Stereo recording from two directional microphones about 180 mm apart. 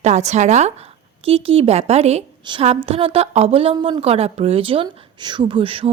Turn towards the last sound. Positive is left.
turn(degrees=-30)  # may be behind; listen again after turning